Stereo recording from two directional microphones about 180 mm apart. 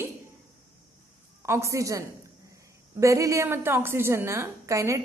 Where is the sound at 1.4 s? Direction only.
15° right (ahead or behind).